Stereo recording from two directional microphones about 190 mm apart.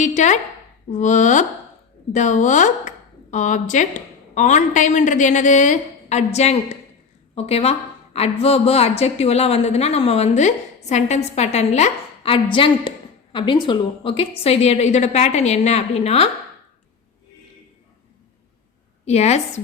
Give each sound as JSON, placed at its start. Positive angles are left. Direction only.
{"t": 0.0, "sound": "a woman's voice", "side_deg": 40}
{"t": 19.0, "sound": "a woman's voice", "side_deg": 35}